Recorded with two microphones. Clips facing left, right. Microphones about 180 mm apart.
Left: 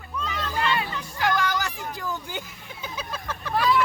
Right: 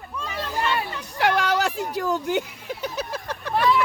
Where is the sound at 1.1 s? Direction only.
70° right (ahead or behind).